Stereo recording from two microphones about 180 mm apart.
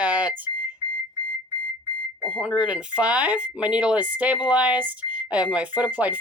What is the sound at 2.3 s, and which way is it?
Speech, 5° right (ahead or behind).